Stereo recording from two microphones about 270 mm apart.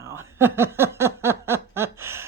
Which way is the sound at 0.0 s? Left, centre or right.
Centre.